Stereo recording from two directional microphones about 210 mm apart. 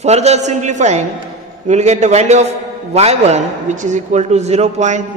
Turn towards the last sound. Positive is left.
turn(degrees=-35)  # may be behind; listen again after turning